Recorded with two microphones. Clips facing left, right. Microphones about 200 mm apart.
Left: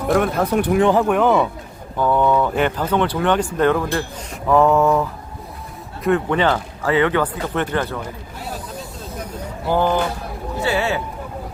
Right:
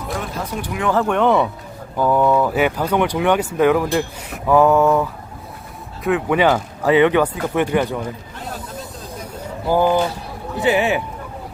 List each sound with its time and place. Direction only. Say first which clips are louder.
0.1 s speech: left 10 dB; 60° left (ahead or behind)
1.0 s mantra: even; 5° left (ahead or behind)
2.0 s speech: right 1 dB; 5° right (ahead or behind)
4.4 s mantra: right 1 dB; centre (ahead or behind)
6.1 s speech: right 1 dB; 10° right (ahead or behind)
9.3 s a sound: right 2 dB; 10° right (ahead or behind)
10.6 s speech: right 4 dB; 15° right (ahead or behind)